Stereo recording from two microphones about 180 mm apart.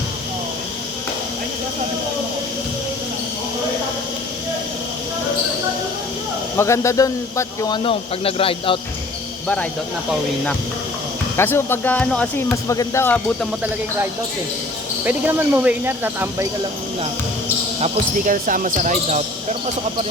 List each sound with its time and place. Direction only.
6.6 s speech: 15° left (ahead or behind)
7.9 s speech: 30° left (ahead or behind)
11.3 s speech: 15° left (ahead or behind)
15.0 s speech: 10° right (ahead or behind)
17.7 s speech: 40° right (ahead or behind)